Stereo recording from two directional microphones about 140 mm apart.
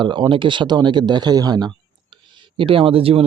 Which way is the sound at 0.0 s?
35° right (ahead or behind).